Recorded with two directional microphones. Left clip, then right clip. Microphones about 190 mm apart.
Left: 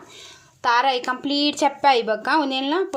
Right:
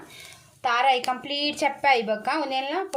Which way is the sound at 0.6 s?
40° left (ahead or behind).